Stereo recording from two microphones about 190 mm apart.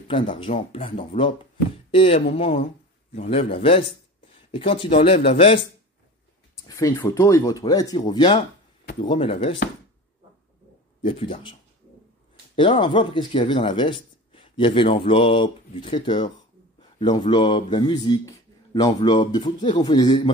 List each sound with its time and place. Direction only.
0.1 s speech: 25° left (ahead or behind)
6.5 s speech: 15° left (ahead or behind)
11.0 s speech: 25° left (ahead or behind)
12.5 s speech: 25° left (ahead or behind)